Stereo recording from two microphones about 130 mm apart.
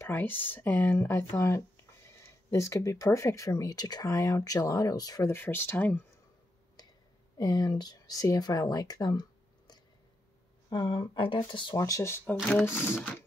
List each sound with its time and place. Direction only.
0.0 s speech: 15° left (ahead or behind)
5.3 s speech: 15° left (ahead or behind)
7.3 s speech: 30° left (ahead or behind)
11.7 s speech: 25° left (ahead or behind)